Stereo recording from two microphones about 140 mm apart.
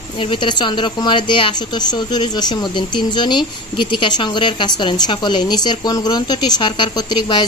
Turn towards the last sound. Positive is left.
turn(degrees=30)  # may be behind; listen again after turning